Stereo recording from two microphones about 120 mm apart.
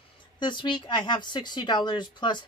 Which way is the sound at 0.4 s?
40° left (ahead or behind).